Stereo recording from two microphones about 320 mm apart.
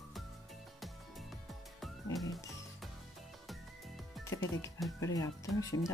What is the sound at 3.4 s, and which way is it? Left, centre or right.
Music, centre.